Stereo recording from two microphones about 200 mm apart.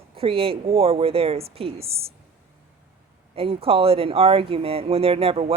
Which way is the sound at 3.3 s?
30° right (ahead or behind).